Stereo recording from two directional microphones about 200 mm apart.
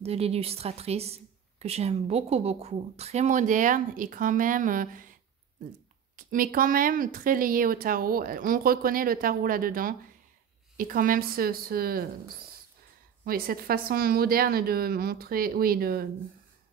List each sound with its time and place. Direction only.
0.0 s a woman's voice: 30° right (ahead or behind)
6.1 s speech: 45° right (ahead or behind)
13.2 s speech: 45° right (ahead or behind)